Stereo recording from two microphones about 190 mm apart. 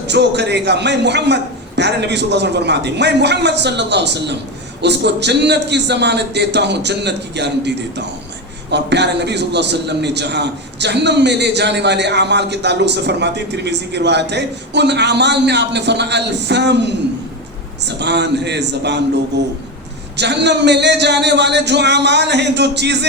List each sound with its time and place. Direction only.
0.1 s a man's voice: 60° right (ahead or behind)